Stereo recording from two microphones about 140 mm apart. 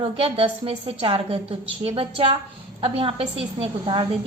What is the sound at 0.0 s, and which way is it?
A woman's voice, 40° right (ahead or behind).